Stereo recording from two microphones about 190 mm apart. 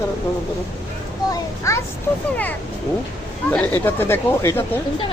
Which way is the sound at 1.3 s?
15° left (ahead or behind).